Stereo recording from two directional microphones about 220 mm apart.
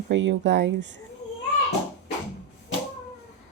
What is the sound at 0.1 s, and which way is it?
Speech, 55° right (ahead or behind).